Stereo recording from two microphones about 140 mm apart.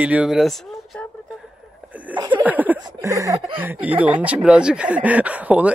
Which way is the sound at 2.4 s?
10° right (ahead or behind).